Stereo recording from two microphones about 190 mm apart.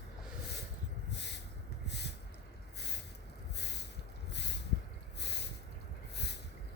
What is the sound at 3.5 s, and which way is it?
Snort, 60° left (ahead or behind).